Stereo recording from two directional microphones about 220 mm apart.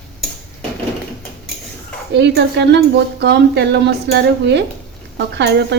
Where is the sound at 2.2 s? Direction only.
50° right (ahead or behind).